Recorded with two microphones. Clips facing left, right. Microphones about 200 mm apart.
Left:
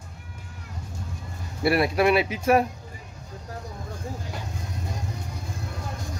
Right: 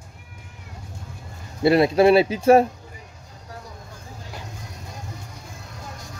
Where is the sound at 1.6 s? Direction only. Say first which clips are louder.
Right 5 dB; 25° right (ahead or behind).